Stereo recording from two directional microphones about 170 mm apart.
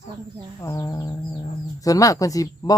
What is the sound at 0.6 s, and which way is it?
Speech, 20° left (ahead or behind).